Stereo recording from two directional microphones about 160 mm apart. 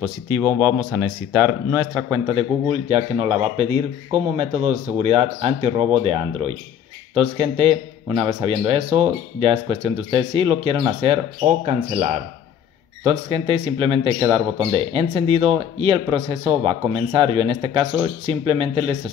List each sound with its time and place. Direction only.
0.0 s speech: 15° right (ahead or behind)
2.7 s speech: 40° right (ahead or behind)
8.1 s a man's voice: 25° right (ahead or behind)
8.5 s speech: 40° right (ahead or behind)